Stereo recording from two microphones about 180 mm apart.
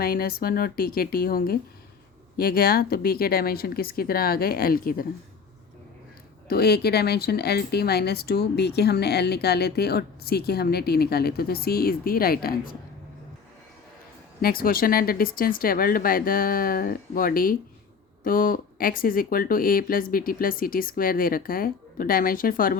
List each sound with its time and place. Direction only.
0.0 s speech: 55° left (ahead or behind)
6.5 s speech: 60° left (ahead or behind)
14.4 s speech: 55° left (ahead or behind)